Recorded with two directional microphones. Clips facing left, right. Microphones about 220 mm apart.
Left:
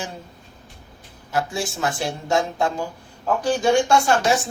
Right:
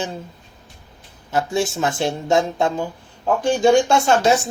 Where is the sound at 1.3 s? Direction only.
25° right (ahead or behind).